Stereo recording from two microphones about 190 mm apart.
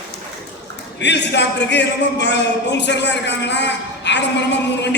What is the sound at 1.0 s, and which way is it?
Speech, 65° left (ahead or behind).